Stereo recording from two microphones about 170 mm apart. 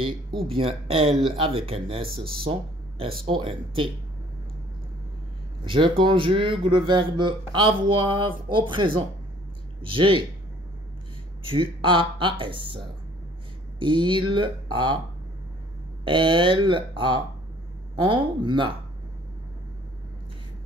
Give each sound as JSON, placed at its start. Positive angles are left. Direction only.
{"t": 0.0, "sound": "speech", "side_deg": -30}
{"t": 5.7, "sound": "speech", "side_deg": -30}
{"t": 11.4, "sound": "speech", "side_deg": -30}
{"t": 16.0, "sound": "speech", "side_deg": -30}